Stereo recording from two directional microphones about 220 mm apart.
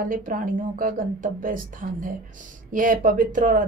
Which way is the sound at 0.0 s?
40° right (ahead or behind).